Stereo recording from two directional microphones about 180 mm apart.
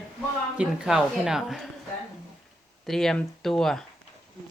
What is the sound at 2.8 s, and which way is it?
Speech, centre (ahead or behind).